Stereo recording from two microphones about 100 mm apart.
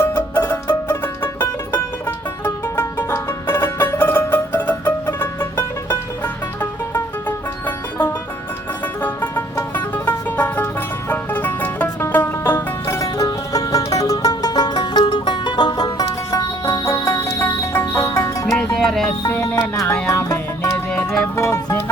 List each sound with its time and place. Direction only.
0.0 s music: 20° left (ahead or behind)
9.0 s music: 20° left (ahead or behind)
18.6 s music: 5° left (ahead or behind)
19.3 s music: 30° left (ahead or behind)